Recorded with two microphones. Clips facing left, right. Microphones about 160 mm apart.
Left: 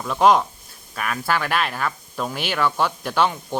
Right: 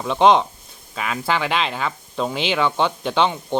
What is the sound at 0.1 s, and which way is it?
Speech, 25° right (ahead or behind).